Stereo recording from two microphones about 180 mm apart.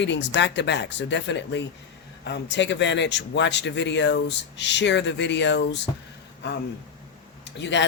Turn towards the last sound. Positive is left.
turn(degrees=75)  # may be behind; listen again after turning